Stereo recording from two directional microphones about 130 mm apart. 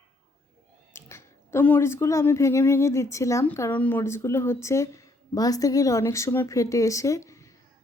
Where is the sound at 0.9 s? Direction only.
20° left (ahead or behind).